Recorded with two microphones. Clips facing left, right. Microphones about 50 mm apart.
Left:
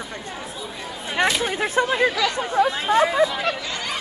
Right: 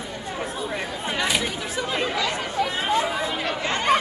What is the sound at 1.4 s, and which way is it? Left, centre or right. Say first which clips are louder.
Speech: left 6 dB; left.